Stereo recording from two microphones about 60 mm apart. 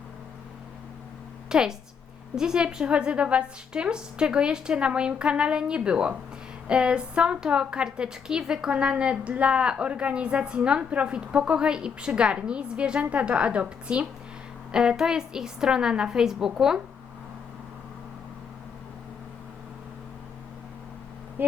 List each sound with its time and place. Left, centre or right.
1.5 s a woman's voice: centre